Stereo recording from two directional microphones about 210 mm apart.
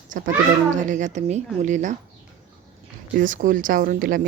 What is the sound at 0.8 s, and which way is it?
Speech, 35° right (ahead or behind).